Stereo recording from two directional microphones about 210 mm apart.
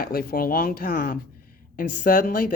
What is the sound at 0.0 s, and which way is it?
Speech, 45° left (ahead or behind).